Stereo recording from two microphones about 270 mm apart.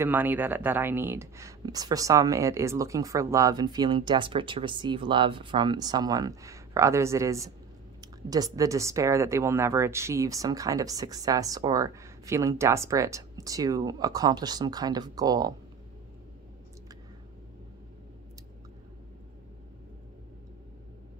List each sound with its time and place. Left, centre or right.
0.0 s speech: centre